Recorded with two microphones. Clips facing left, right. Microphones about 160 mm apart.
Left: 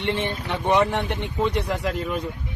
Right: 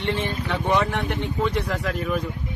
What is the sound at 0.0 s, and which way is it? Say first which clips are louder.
Speech: even; 20° left (ahead or behind).